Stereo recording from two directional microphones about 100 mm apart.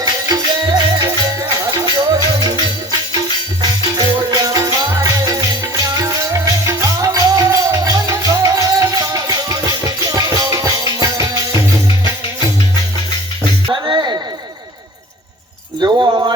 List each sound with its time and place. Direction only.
0.0 s music: 40° right (ahead or behind)
3.6 s music: 40° right (ahead or behind)
13.7 s music: 45° right (ahead or behind)
15.8 s a sound: 40° right (ahead or behind)